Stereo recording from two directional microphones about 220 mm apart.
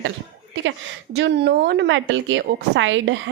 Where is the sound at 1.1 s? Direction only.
50° right (ahead or behind).